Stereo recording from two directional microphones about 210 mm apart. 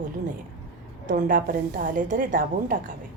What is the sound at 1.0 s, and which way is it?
A woman's voice, 40° right (ahead or behind).